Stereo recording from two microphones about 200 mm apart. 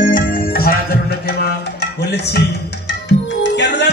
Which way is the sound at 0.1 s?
45° left (ahead or behind).